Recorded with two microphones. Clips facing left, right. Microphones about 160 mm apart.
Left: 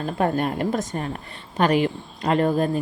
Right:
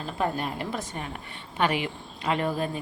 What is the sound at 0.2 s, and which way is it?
Speech, 55° left (ahead or behind).